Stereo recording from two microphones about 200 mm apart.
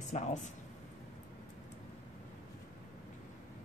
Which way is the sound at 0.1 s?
35° left (ahead or behind).